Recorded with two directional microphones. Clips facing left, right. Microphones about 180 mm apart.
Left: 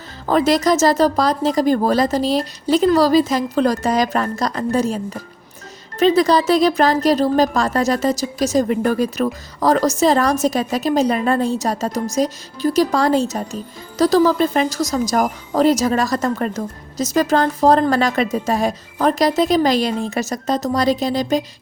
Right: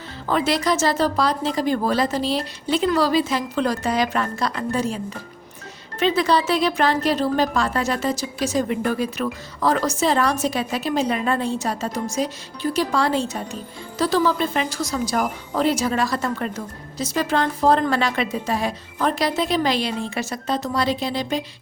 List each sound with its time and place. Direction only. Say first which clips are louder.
0.3 s speech: left 5 dB; 40° left (ahead or behind)
6.0 s speech: left 5 dB; 40° left (ahead or behind)